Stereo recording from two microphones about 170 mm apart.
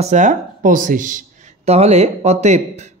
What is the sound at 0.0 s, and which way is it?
Speech, 45° right (ahead or behind).